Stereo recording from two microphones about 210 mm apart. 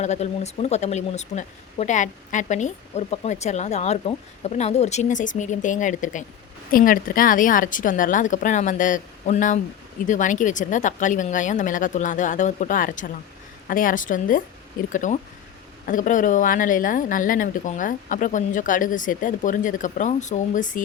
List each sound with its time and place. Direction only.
0.0 s speech: 30° left (ahead or behind)